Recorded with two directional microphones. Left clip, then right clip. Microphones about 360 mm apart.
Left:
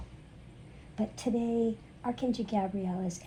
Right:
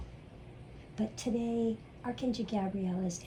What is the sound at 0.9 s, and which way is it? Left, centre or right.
A woman's voice, centre.